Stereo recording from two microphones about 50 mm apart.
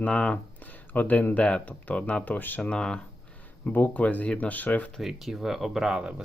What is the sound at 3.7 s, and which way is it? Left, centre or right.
Speech, left.